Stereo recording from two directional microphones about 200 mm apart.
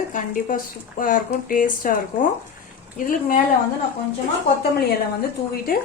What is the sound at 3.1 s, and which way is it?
Speech, 45° left (ahead or behind).